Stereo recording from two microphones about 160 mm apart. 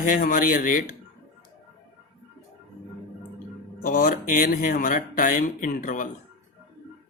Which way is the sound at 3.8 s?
60° left (ahead or behind).